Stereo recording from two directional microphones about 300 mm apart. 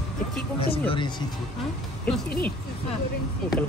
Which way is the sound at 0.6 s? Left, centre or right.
Centre.